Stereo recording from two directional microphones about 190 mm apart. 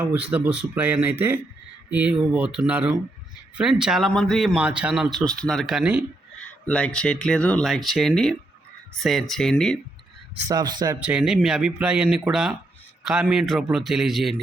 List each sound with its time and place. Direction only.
0.0 s a man's voice: 10° right (ahead or behind)
6.4 s a man's voice: 5° left (ahead or behind)
10.5 s speech: 20° right (ahead or behind)
11.0 s a man's voice: 5° right (ahead or behind)